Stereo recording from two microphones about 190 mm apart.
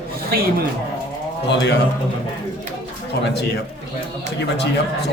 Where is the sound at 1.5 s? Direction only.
65° left (ahead or behind).